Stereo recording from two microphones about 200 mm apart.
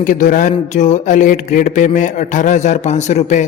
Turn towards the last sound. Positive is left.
turn(degrees=35)  # may be behind; listen again after turning